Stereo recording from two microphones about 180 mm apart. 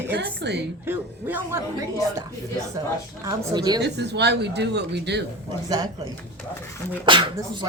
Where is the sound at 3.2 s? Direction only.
20° right (ahead or behind).